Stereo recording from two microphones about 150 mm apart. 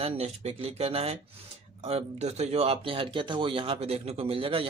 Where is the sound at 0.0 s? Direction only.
45° right (ahead or behind).